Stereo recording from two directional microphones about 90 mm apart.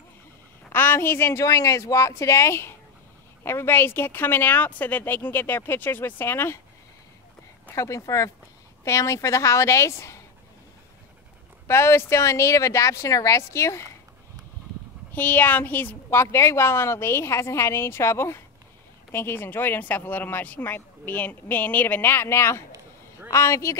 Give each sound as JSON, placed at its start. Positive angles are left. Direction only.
{"t": 0.7, "sound": "a woman's voice", "side_deg": 25}
{"t": 7.7, "sound": "speech", "side_deg": 35}
{"t": 11.6, "sound": "speech", "side_deg": 30}
{"t": 15.1, "sound": "speech", "side_deg": 20}